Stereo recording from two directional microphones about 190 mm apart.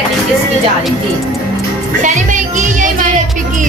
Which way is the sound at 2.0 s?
40° right (ahead or behind).